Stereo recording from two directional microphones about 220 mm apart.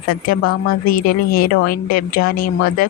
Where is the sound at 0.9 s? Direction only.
40° left (ahead or behind).